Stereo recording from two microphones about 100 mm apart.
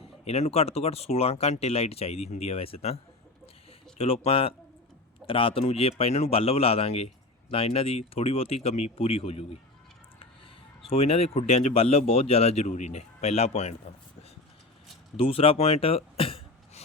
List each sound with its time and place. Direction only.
0.3 s a man's voice: 90° left
10.8 s speech: 75° left (ahead or behind)
15.1 s throat clearing: 65° left (ahead or behind)